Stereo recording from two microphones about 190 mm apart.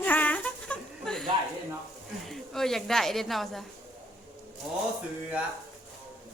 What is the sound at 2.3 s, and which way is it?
A woman's voice, centre (ahead or behind).